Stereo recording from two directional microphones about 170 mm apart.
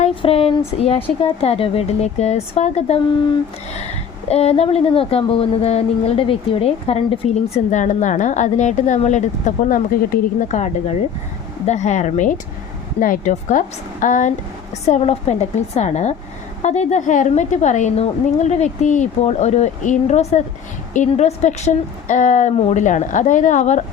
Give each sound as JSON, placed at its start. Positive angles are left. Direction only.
{"t": 0.0, "sound": "speech", "side_deg": 35}
{"t": 4.3, "sound": "a woman's voice", "side_deg": 40}